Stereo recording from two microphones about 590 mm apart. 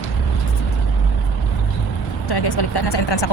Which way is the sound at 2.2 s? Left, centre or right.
Left.